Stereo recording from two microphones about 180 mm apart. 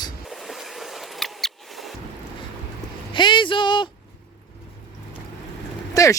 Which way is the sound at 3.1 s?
25° left (ahead or behind).